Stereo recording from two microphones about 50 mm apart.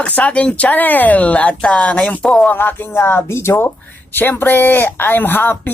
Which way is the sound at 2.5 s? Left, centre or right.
Left.